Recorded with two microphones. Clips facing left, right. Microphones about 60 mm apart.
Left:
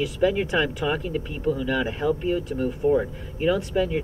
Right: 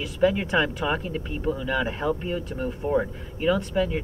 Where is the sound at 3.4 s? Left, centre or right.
Centre.